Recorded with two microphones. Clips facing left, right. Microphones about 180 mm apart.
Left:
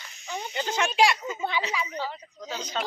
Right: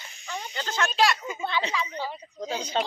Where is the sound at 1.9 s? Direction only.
10° right (ahead or behind).